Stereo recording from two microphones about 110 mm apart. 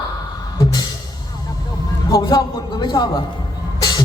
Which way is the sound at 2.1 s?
40° left (ahead or behind).